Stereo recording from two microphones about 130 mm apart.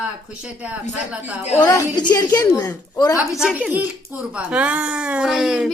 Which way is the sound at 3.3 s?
5° right (ahead or behind).